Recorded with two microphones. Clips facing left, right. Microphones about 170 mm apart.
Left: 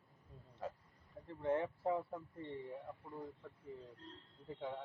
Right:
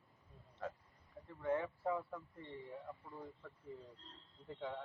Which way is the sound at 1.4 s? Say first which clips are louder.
Left 1 dB; 30° left (ahead or behind).